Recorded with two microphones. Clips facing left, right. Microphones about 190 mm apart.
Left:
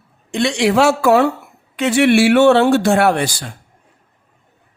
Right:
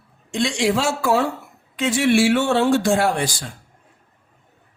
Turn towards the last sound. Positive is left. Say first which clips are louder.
# left 5 dB
turn(degrees=65)  # may be behind; listen again after turning